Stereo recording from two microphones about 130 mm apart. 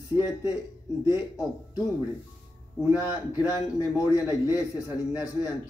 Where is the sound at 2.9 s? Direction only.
15° right (ahead or behind).